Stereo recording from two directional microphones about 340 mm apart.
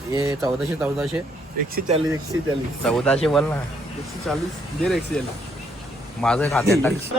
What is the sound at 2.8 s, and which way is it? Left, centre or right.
Speech, centre.